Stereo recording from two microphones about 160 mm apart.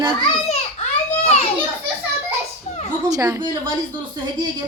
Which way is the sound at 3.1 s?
20° right (ahead or behind).